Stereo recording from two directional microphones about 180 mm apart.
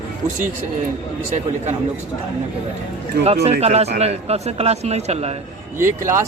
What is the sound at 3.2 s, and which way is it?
Speech, 35° right (ahead or behind).